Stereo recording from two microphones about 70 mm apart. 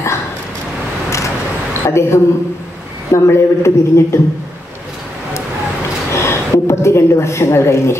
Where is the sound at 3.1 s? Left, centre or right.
Left.